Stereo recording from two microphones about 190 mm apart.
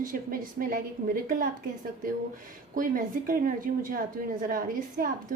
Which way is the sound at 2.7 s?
45° right (ahead or behind).